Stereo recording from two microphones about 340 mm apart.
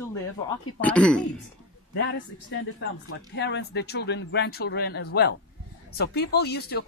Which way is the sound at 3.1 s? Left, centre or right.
Left.